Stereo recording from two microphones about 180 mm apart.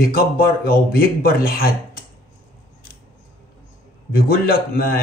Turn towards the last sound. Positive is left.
turn(degrees=55)  # may be behind; listen again after turning